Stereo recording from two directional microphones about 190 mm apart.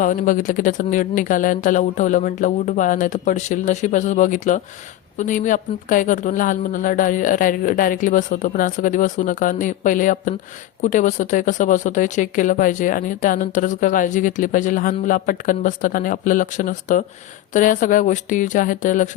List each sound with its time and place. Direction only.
0.0 s speech: 45° left (ahead or behind)